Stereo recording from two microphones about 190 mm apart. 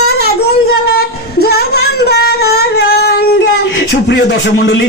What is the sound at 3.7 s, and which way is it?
Music, 65° left (ahead or behind).